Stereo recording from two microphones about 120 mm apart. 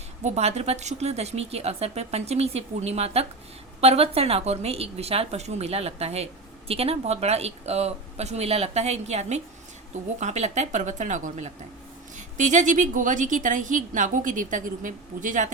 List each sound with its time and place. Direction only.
0.2 s a woman's voice: 65° right (ahead or behind); by 15.4 s 90° right